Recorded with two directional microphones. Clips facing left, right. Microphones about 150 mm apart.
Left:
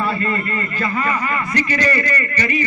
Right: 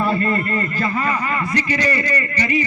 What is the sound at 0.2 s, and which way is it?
Speech, 40° right (ahead or behind).